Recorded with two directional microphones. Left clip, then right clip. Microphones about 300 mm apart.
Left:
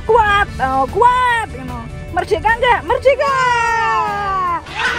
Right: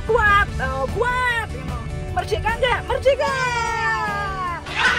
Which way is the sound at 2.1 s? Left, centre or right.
Left.